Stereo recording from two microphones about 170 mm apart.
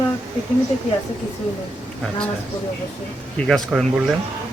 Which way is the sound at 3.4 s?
Centre (ahead or behind).